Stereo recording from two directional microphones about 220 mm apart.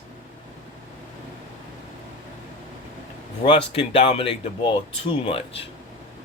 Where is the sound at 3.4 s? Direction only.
25° left (ahead or behind).